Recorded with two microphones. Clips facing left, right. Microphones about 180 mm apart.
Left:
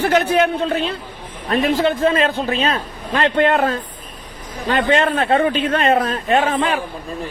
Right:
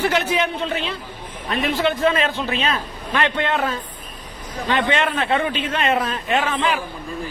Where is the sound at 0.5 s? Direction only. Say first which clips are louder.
Left 5 dB; 40° left (ahead or behind).